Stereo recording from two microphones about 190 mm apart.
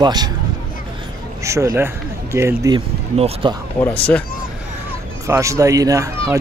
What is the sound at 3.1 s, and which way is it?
Speech, 30° right (ahead or behind).